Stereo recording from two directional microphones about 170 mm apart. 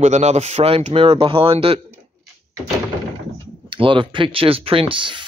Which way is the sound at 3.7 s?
30° right (ahead or behind).